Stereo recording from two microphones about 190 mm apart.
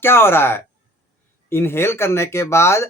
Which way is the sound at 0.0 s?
10° left (ahead or behind).